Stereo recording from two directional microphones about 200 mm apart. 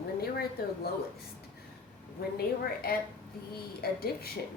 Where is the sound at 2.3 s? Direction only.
50° left (ahead or behind).